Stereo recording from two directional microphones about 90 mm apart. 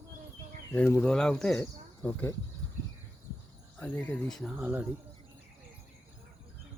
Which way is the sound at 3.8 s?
15° left (ahead or behind).